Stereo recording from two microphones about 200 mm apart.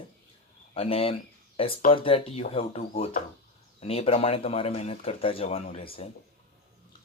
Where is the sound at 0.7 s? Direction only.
30° left (ahead or behind).